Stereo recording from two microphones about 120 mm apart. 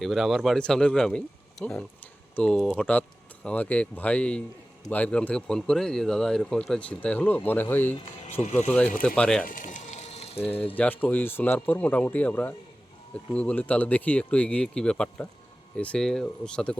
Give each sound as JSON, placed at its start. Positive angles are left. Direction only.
{"t": 0.0, "sound": "speech", "side_deg": 0}
{"t": 8.3, "sound": "speech", "side_deg": 75}
{"t": 9.0, "sound": "speech", "side_deg": 5}
{"t": 9.6, "sound": "music", "side_deg": 90}
{"t": 10.8, "sound": "speech", "side_deg": 15}